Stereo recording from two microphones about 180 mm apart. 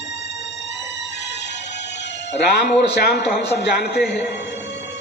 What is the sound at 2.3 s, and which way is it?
A man's voice, 70° left (ahead or behind).